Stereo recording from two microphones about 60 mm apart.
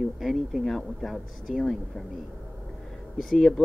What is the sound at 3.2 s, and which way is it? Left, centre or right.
Speech, centre.